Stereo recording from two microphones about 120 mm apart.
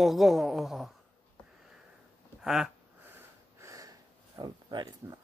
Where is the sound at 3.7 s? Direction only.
30° right (ahead or behind).